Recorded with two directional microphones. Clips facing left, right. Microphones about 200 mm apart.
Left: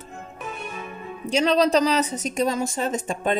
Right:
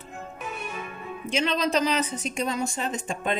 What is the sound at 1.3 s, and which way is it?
Speech, 35° left (ahead or behind).